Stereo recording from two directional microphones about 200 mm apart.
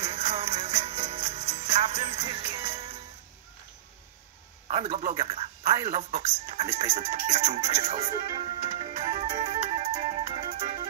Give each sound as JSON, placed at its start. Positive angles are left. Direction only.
{"t": 0.0, "sound": "music", "side_deg": -35}
{"t": 4.6, "sound": "a man's voice", "side_deg": -30}
{"t": 5.9, "sound": "music", "side_deg": -35}